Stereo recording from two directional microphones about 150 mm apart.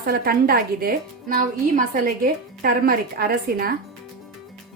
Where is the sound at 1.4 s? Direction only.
60° right (ahead or behind).